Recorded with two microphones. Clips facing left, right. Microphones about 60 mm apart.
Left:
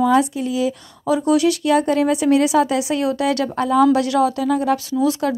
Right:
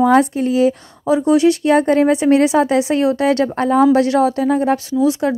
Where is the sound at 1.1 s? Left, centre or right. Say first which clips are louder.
Right 4 dB; right.